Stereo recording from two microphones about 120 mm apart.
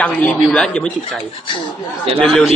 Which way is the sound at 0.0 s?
10° left (ahead or behind).